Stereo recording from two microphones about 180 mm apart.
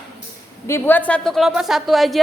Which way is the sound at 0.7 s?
10° left (ahead or behind).